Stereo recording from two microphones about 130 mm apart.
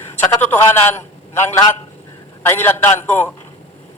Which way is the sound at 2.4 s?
15° left (ahead or behind).